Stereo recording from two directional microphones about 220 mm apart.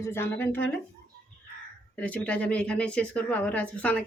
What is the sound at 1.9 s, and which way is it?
Speech, 5° left (ahead or behind).